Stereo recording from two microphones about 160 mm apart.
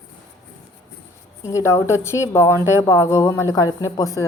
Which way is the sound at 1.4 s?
15° left (ahead or behind).